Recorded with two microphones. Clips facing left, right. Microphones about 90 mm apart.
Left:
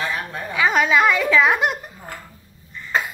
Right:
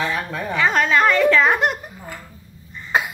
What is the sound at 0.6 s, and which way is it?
A woman's voice, 5° left (ahead or behind).